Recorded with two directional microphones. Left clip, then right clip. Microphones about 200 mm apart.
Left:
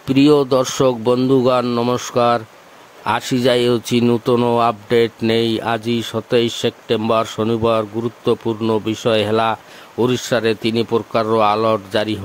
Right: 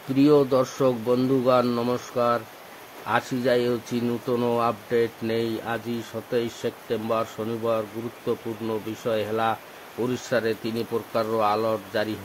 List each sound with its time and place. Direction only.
0.1 s speech: 40° left (ahead or behind)